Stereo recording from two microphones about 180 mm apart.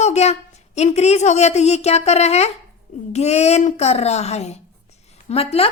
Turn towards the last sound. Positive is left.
turn(degrees=35)  # may be behind; listen again after turning